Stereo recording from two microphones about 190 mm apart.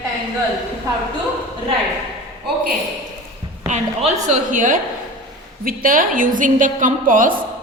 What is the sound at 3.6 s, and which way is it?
A woman's voice, 40° right (ahead or behind).